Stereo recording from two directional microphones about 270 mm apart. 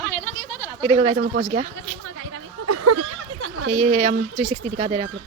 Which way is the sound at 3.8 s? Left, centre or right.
Right.